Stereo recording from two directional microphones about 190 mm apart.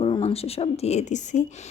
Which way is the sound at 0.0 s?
30° left (ahead or behind).